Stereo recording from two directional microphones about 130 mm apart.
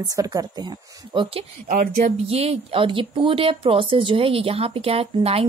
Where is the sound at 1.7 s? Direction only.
70° right (ahead or behind).